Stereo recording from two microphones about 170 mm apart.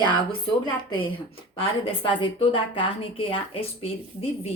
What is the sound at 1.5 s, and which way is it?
A woman's voice, 30° left (ahead or behind).